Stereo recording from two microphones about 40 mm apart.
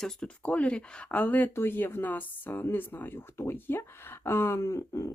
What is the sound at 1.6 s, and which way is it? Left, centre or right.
Speech, left.